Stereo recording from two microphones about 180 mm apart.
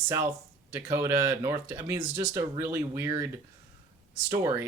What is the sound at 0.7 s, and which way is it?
Speech, 15° right (ahead or behind).